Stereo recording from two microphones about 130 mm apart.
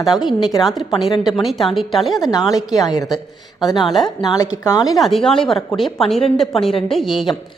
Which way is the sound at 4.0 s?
30° left (ahead or behind).